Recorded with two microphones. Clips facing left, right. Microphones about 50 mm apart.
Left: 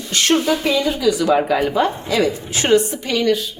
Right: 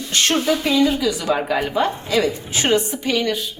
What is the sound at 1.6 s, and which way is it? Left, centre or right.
Speech, left.